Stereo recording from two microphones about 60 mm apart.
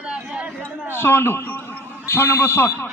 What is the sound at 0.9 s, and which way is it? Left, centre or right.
A man's voice, left.